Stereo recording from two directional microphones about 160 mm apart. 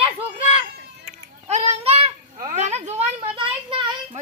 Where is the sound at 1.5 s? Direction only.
45° right (ahead or behind).